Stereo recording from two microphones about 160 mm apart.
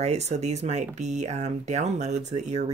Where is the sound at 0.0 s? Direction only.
45° right (ahead or behind).